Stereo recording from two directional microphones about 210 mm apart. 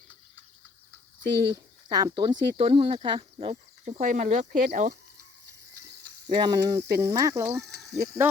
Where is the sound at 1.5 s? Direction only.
20° right (ahead or behind); by 4.9 s 35° right (ahead or behind).